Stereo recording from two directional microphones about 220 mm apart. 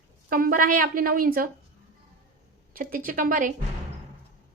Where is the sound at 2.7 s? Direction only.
40° right (ahead or behind).